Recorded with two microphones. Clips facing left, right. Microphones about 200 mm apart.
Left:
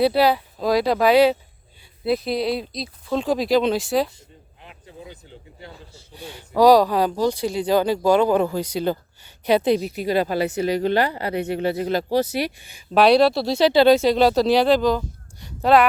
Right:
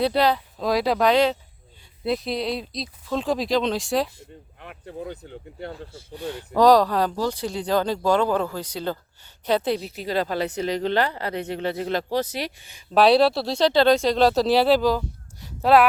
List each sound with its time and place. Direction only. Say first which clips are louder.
0.0 s speech: left 3 dB; 10° left (ahead or behind)
4.2 s speech: right 5 dB; 60° right (ahead or behind)
6.1 s speech: left 1 dB; 10° left (ahead or behind)
12.9 s speech: left 2 dB; centre (ahead or behind)